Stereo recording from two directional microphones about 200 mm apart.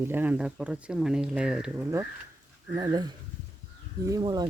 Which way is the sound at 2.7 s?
20° right (ahead or behind).